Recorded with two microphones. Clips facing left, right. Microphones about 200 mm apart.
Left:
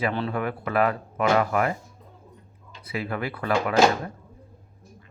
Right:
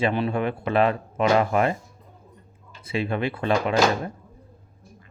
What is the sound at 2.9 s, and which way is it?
Speech, 25° right (ahead or behind).